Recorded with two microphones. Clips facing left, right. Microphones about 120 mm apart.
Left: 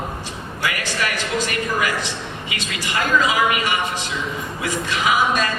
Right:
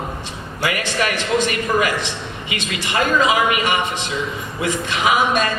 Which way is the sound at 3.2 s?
25° right (ahead or behind).